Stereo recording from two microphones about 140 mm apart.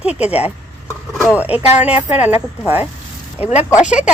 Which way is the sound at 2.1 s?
15° right (ahead or behind).